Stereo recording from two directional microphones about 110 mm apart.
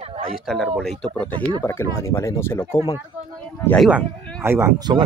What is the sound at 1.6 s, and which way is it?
Speech, 20° left (ahead or behind).